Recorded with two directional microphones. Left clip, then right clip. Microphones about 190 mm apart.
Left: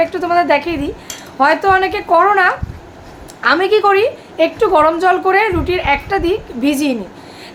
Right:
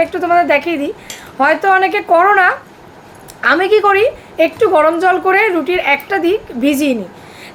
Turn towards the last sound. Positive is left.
turn(degrees=-10)  # may be behind; listen again after turning